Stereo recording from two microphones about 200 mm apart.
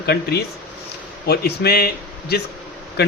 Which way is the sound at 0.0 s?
50° left (ahead or behind).